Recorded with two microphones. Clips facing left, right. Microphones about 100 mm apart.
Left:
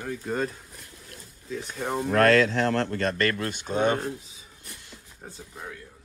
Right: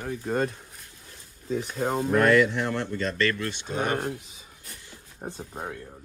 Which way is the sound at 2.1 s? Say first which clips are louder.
Left 1 dB; 90° left.